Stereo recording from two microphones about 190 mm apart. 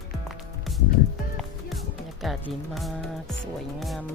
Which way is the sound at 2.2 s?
Centre (ahead or behind).